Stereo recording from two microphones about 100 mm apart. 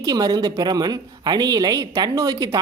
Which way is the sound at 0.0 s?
40° right (ahead or behind).